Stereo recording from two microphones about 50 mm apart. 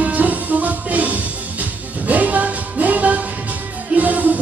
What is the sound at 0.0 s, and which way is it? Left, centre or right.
Music, right.